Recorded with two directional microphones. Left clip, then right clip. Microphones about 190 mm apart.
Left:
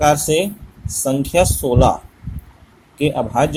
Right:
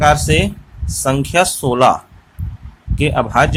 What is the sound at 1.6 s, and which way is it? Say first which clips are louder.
Speech: right 1 dB; 70° right (ahead or behind).